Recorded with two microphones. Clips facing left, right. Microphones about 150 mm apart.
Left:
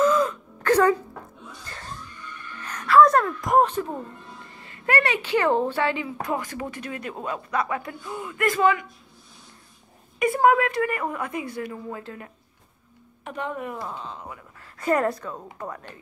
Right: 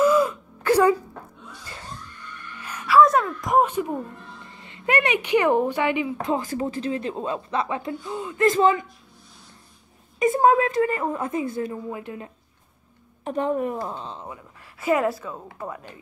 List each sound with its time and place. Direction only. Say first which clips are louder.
0.0 s a sound: right 2 dB; 10° right (ahead or behind)
2.6 s gasp: even; 10° right (ahead or behind)
3.7 s a woman's voice: right 2 dB; 15° right (ahead or behind)
10.1 s a woman's voice: right 1 dB; 20° right (ahead or behind)
13.2 s a woman's voice: right 7 dB; 35° right (ahead or behind)
14.8 s a woman's voice: right 1 dB; 5° right (ahead or behind)